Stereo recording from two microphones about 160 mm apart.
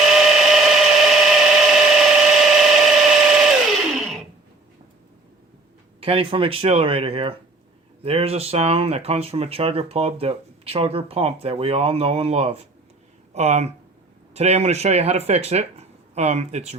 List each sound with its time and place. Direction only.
0.1 s tools: 5° right (ahead or behind)
3.9 s a sound: centre (ahead or behind)
6.0 s speech: 35° right (ahead or behind)